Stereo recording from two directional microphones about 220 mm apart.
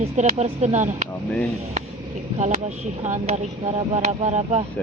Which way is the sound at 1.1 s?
5° left (ahead or behind).